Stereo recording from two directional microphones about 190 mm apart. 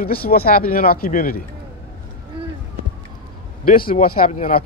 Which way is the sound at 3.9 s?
45° left (ahead or behind).